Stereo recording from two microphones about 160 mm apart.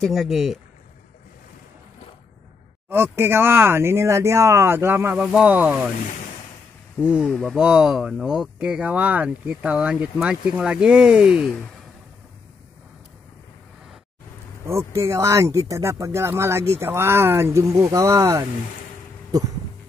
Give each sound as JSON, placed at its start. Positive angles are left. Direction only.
{"t": 0.0, "sound": "speech", "side_deg": 0}
{"t": 2.9, "sound": "speech", "side_deg": -15}
{"t": 7.0, "sound": "speech", "side_deg": -5}
{"t": 14.7, "sound": "speech", "side_deg": -15}
{"t": 19.3, "sound": "a sound", "side_deg": -20}